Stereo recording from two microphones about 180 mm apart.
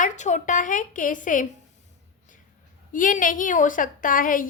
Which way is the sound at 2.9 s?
50° left (ahead or behind).